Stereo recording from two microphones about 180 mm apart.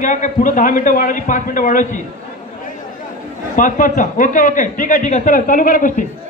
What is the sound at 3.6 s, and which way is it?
A man's voice, 45° left (ahead or behind).